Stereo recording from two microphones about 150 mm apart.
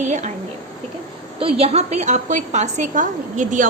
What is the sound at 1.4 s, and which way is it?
A woman's voice, 40° right (ahead or behind).